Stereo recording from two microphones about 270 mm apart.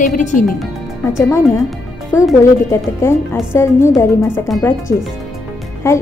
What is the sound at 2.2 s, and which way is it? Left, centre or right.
Speech, centre.